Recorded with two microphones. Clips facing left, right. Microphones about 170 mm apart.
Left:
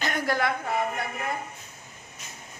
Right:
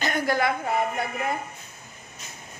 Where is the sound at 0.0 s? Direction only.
Centre (ahead or behind).